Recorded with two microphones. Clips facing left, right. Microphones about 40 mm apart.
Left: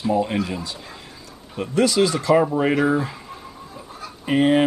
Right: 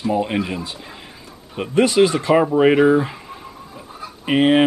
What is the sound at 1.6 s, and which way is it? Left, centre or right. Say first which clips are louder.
Speech: right 4 dB; right.